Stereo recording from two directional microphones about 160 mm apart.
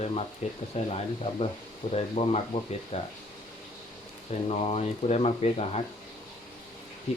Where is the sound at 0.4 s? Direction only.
45° left (ahead or behind).